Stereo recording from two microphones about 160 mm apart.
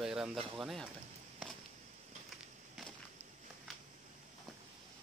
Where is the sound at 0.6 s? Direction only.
Centre (ahead or behind).